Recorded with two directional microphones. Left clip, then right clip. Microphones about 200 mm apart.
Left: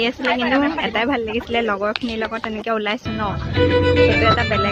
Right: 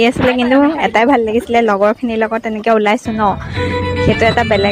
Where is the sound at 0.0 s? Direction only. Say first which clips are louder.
Right 7 dB; 40° right (ahead or behind).